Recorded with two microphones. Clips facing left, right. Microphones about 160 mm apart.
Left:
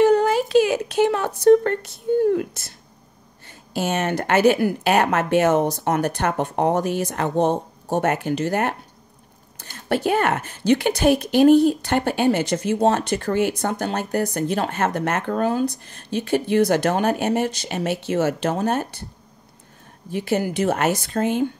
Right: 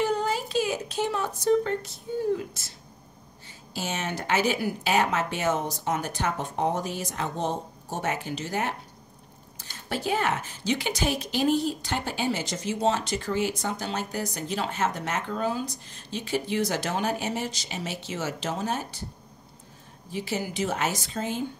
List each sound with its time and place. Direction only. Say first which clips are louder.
0.0 s a woman's voice: left 10 dB; 65° left (ahead or behind)
20.1 s a woman's voice: left 8 dB; 60° left (ahead or behind)